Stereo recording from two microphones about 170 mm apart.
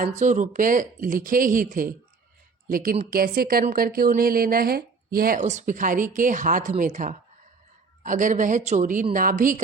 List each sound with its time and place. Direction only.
0.1 s speech: 45° right (ahead or behind)